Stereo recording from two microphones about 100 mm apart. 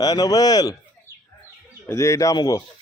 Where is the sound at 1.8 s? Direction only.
30° left (ahead or behind).